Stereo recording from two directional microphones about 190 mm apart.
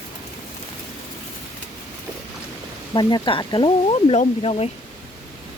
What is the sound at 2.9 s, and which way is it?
Speech, 25° left (ahead or behind).